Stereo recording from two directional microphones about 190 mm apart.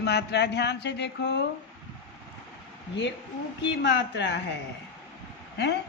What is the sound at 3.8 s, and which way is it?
Speech, 65° left (ahead or behind).